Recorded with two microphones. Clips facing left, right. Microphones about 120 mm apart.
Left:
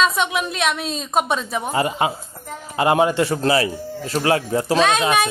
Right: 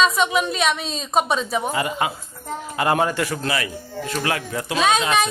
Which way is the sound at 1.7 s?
30° left (ahead or behind).